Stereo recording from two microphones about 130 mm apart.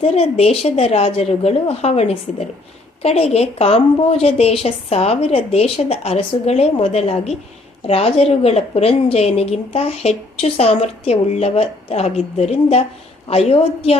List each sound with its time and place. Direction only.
0.0 s a woman's voice: 50° left (ahead or behind)